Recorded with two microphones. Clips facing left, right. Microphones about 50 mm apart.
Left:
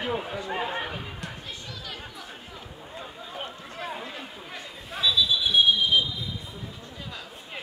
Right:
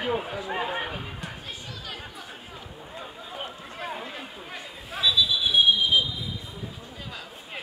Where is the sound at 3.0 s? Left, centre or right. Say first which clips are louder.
Even; centre.